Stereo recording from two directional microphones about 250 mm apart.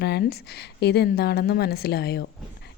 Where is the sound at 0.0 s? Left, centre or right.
Left.